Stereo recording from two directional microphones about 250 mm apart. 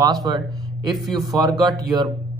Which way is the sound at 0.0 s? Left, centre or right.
Centre.